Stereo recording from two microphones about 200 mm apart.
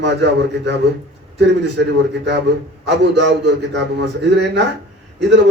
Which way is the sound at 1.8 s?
60° right (ahead or behind).